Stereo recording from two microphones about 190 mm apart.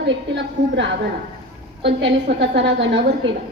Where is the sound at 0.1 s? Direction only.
70° right (ahead or behind).